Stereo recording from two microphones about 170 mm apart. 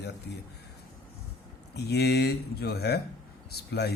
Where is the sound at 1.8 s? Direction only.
75° left (ahead or behind).